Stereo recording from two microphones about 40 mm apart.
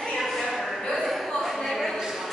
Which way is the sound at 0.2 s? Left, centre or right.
Centre.